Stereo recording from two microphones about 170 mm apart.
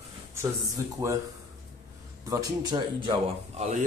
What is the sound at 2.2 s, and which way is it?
Speech, 25° right (ahead or behind).